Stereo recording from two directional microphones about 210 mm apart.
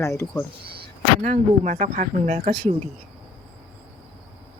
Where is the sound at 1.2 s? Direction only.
35° right (ahead or behind).